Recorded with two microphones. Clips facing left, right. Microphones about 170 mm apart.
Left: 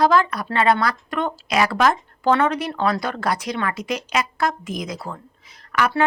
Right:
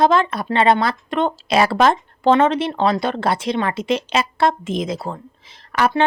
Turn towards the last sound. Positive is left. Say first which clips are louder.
# right 2 dB
turn(degrees=-25)  # may be behind; listen again after turning